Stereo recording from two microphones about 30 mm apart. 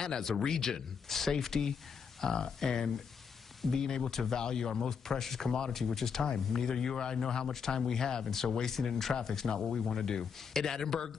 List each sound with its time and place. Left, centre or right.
0.0 s speech: centre